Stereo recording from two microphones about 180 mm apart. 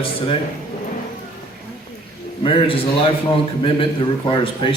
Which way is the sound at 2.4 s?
30° left (ahead or behind).